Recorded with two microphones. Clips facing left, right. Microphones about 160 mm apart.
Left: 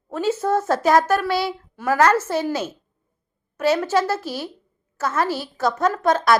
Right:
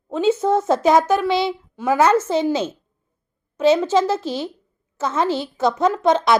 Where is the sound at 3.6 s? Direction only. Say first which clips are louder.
Right 3 dB; 20° right (ahead or behind).